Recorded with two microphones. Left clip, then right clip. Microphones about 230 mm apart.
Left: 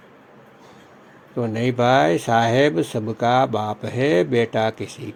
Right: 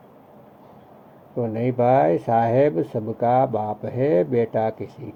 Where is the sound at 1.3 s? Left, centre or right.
Left.